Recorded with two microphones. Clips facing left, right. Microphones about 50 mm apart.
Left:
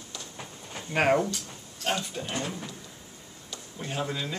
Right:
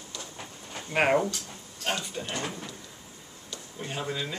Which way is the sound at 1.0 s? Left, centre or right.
Centre.